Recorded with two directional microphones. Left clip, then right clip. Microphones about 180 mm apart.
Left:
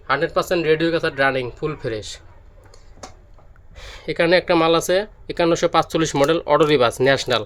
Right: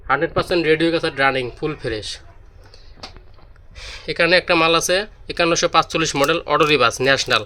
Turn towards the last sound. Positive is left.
turn(degrees=15)  # may be behind; listen again after turning